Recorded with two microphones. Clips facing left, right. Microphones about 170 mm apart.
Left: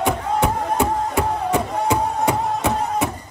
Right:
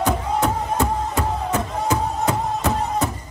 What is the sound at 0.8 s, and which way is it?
Music, 15° left (ahead or behind).